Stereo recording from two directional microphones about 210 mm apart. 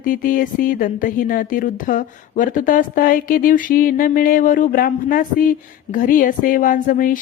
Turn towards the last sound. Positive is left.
turn(degrees=40)  # may be behind; listen again after turning